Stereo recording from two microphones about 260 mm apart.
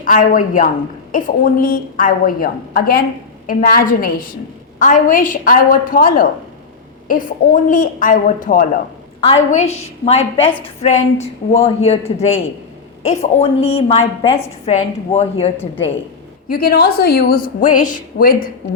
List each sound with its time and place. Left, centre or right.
0.0 s a woman's voice: left
16.5 s a woman's voice: left